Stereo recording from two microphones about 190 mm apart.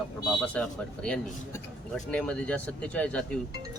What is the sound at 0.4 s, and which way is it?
Speech, 5° left (ahead or behind).